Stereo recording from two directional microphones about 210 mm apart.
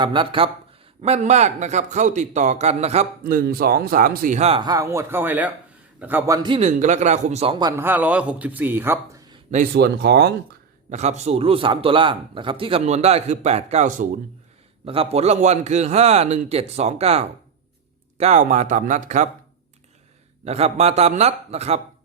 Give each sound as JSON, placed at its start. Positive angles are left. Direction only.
{"t": 0.0, "sound": "a man's voice", "side_deg": -25}
{"t": 9.5, "sound": "speech", "side_deg": -45}
{"t": 10.9, "sound": "a man's voice", "side_deg": -30}
{"t": 20.4, "sound": "a man's voice", "side_deg": -30}